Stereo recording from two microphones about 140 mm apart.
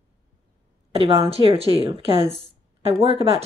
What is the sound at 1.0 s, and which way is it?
Speech, 45° right (ahead or behind).